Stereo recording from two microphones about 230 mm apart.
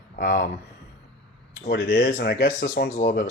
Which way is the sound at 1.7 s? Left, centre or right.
Left.